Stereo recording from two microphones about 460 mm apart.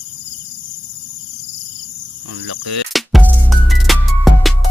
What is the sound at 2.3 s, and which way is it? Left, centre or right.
Speech, right.